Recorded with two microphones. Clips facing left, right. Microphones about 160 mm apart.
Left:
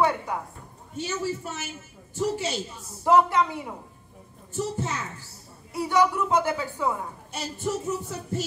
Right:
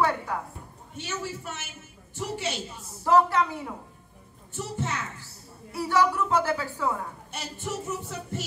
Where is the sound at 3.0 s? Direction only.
15° left (ahead or behind).